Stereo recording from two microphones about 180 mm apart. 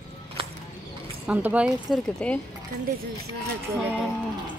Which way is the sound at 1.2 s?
10° right (ahead or behind).